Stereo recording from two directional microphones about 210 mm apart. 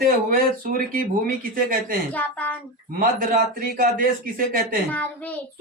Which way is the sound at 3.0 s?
40° right (ahead or behind).